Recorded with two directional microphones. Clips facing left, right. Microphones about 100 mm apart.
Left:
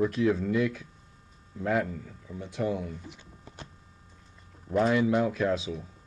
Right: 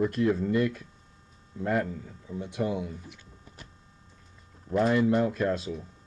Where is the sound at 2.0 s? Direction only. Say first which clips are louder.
Right 3 dB; 10° right (ahead or behind).